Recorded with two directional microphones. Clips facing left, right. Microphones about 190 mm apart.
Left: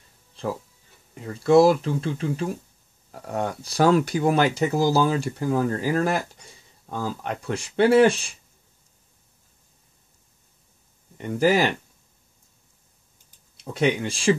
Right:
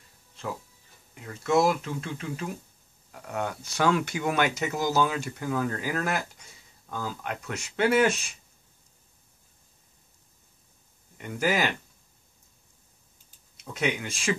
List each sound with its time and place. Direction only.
1.1 s speech: 35° left (ahead or behind)
11.1 s speech: 30° left (ahead or behind)
13.6 s speech: 35° left (ahead or behind)